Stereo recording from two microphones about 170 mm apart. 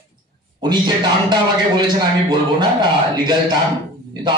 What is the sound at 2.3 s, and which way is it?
Speech, 25° right (ahead or behind).